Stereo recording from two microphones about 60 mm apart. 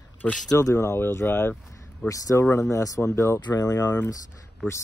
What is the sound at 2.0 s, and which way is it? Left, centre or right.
Speech, left.